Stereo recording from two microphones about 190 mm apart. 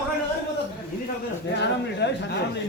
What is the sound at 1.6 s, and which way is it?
Speech, 65° left (ahead or behind).